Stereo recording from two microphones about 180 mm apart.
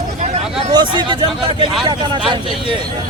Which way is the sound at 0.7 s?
25° right (ahead or behind).